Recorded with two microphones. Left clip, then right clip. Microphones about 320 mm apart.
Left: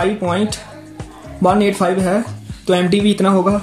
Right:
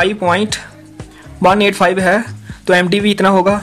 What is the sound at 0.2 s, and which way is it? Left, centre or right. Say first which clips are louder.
Speech: right 5 dB; right.